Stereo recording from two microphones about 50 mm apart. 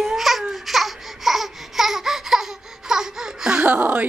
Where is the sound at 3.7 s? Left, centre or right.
Right.